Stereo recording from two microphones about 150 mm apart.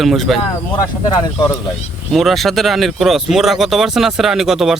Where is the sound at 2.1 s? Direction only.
Centre (ahead or behind).